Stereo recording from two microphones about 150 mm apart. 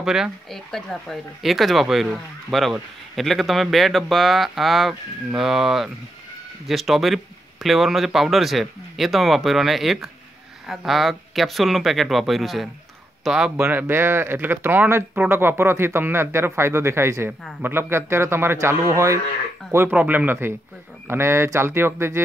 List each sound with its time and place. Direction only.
0.0 s speech: 5° right (ahead or behind)
13.6 s speech: 15° right (ahead or behind)